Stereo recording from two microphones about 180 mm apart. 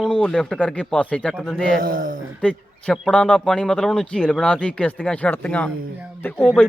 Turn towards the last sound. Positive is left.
turn(degrees=5)  # may be behind; listen again after turning